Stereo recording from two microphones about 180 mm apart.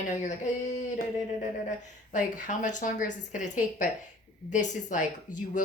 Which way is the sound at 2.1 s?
45° left (ahead or behind).